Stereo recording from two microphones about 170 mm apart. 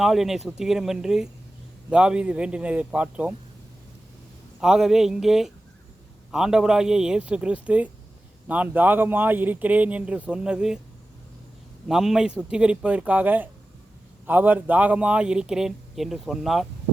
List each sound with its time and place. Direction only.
0.0 s speech: centre (ahead or behind)
4.6 s speech: 5° right (ahead or behind)
11.9 s speech: 5° right (ahead or behind)